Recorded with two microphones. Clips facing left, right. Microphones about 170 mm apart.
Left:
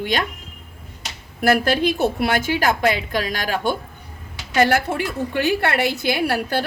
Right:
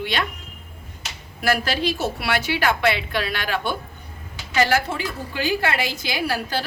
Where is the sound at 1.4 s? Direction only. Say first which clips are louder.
Left 5 dB; 50° left (ahead or behind).